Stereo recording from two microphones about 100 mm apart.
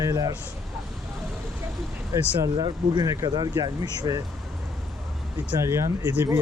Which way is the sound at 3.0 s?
35° right (ahead or behind).